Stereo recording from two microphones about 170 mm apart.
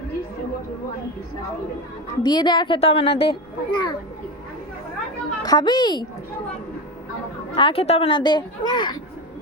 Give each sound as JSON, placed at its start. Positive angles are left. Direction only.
{"t": 2.2, "sound": "a child's voice", "side_deg": 25}
{"t": 5.4, "sound": "a child's voice", "side_deg": 25}
{"t": 7.5, "sound": "a child's voice", "side_deg": 30}